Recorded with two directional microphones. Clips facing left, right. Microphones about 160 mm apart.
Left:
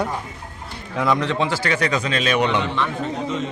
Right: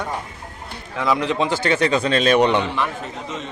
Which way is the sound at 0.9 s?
Centre (ahead or behind).